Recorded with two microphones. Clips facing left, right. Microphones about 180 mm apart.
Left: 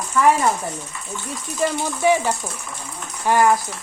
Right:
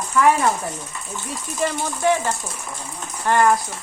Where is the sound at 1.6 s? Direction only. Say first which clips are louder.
Left 2 dB; 10° left (ahead or behind).